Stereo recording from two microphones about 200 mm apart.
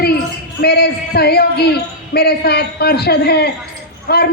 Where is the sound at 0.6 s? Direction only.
50° left (ahead or behind).